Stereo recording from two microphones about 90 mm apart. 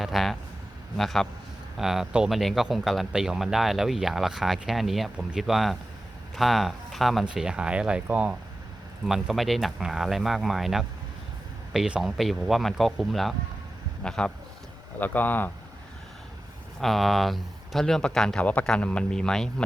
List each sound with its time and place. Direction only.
0.0 s speech: centre (ahead or behind); by 8.4 s 15° right (ahead or behind)
9.0 s a man's voice: 5° right (ahead or behind); by 15.5 s 20° left (ahead or behind)
16.8 s speech: centre (ahead or behind)